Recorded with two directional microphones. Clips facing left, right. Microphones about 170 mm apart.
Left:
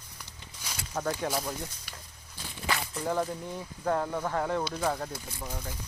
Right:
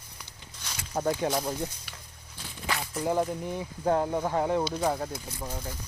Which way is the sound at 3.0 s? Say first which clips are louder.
Right 3 dB; 20° right (ahead or behind).